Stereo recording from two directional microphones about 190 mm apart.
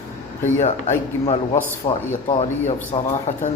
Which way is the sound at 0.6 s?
35° left (ahead or behind).